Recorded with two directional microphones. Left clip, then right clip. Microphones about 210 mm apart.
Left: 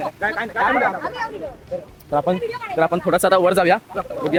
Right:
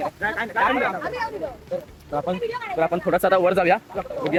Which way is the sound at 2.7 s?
20° left (ahead or behind).